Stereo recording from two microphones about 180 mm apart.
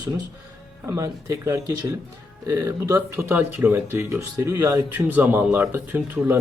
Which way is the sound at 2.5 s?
15° right (ahead or behind).